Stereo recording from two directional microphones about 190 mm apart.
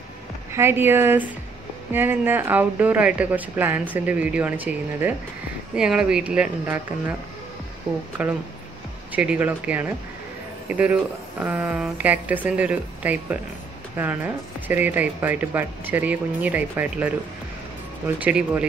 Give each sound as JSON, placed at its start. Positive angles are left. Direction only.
{"t": 0.5, "sound": "speech", "side_deg": -15}
{"t": 8.2, "sound": "speech", "side_deg": -5}